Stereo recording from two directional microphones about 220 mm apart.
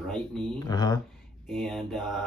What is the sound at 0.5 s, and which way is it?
Speech, 15° left (ahead or behind).